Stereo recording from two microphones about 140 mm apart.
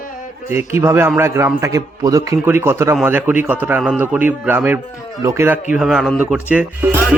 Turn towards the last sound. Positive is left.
turn(degrees=-10)  # may be behind; listen again after turning